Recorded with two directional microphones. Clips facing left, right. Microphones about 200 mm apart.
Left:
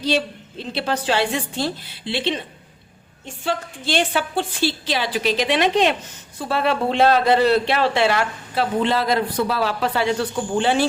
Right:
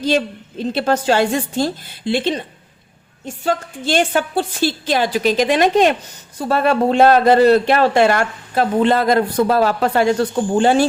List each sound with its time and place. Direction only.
0.7 s a man's voice: 45° right (ahead or behind)